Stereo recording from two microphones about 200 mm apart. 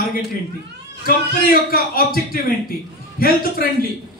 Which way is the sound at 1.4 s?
45° left (ahead or behind).